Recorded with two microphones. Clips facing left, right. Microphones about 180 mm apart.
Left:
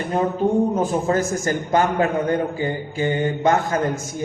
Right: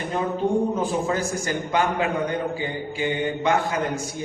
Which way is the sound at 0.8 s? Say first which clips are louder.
Left 4 dB; 45° left (ahead or behind).